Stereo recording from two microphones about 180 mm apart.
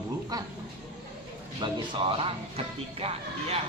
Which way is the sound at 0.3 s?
20° right (ahead or behind).